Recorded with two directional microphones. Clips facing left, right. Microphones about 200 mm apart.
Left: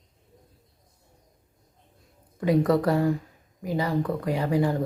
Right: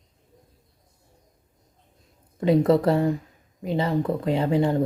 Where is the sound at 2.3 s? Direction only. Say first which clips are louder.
Right 3 dB; 25° right (ahead or behind).